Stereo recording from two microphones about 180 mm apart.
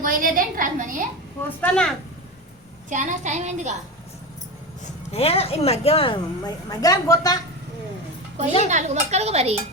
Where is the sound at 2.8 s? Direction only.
40° right (ahead or behind).